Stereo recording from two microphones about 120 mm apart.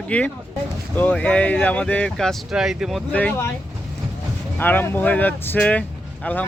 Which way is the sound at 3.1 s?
15° left (ahead or behind).